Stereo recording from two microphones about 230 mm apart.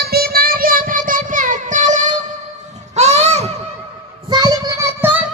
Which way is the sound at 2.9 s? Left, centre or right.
Right.